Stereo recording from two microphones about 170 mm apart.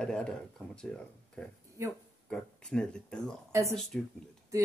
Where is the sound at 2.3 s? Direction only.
5° left (ahead or behind).